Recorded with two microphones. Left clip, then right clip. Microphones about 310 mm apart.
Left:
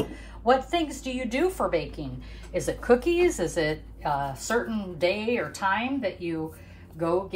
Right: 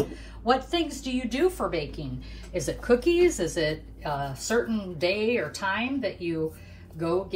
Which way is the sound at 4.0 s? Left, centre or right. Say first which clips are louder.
Left 3 dB; left.